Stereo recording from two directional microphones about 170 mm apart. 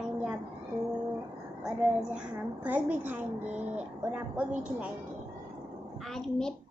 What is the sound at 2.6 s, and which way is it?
A woman's voice, 10° right (ahead or behind).